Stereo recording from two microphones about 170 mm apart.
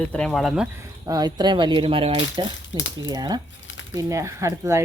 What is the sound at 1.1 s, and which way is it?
Speech, 25° right (ahead or behind).